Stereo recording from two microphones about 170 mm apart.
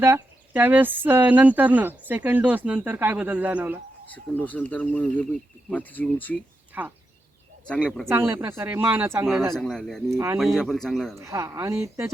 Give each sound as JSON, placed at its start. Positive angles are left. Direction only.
{"t": 0.0, "sound": "speech", "side_deg": -15}
{"t": 4.1, "sound": "speech", "side_deg": 10}
{"t": 6.7, "sound": "speech", "side_deg": -10}
{"t": 7.7, "sound": "speech", "side_deg": 5}
{"t": 8.1, "sound": "speech", "side_deg": -15}
{"t": 9.6, "sound": "speech", "side_deg": 5}
{"t": 11.2, "sound": "speech", "side_deg": -20}